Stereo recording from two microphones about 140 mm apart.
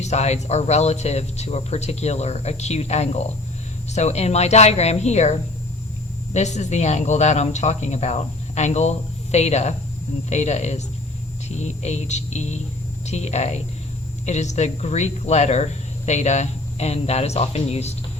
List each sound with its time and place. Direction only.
0.0 s speech: 55° left (ahead or behind)